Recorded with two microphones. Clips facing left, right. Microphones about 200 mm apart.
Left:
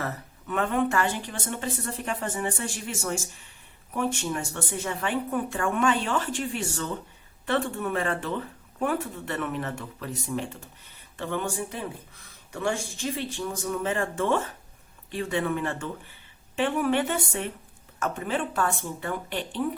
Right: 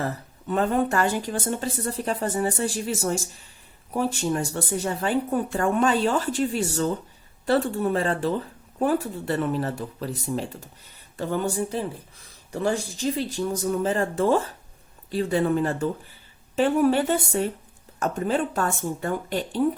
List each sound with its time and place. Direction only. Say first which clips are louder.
0.0 s speech: right 4 dB; 30° right (ahead or behind)